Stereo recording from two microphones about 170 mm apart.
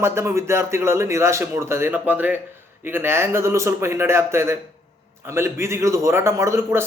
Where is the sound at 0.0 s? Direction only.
15° right (ahead or behind).